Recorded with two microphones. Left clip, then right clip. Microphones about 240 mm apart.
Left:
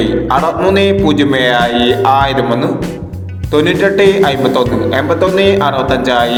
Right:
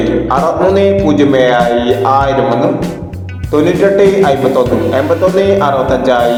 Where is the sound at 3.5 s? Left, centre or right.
Left.